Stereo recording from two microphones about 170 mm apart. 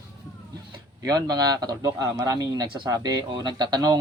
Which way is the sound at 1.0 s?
20° right (ahead or behind).